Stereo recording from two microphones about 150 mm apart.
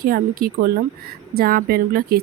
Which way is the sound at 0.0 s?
85° right.